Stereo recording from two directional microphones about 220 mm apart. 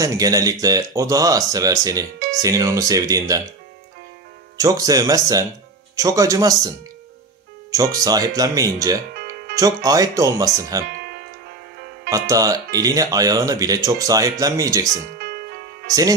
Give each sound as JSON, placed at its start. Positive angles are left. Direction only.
{"t": 0.0, "sound": "speech", "side_deg": -15}
{"t": 4.5, "sound": "speech", "side_deg": -15}
{"t": 7.7, "sound": "speech", "side_deg": -15}
{"t": 9.1, "sound": "music", "side_deg": -45}
{"t": 9.6, "sound": "speech", "side_deg": -15}
{"t": 11.0, "sound": "music", "side_deg": -45}
{"t": 12.3, "sound": "speech", "side_deg": -15}
{"t": 15.2, "sound": "music", "side_deg": -45}